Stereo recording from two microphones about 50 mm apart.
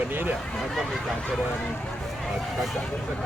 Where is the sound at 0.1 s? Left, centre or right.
Right.